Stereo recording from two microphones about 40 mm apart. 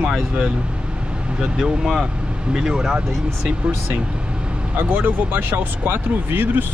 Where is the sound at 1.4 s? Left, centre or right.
Centre.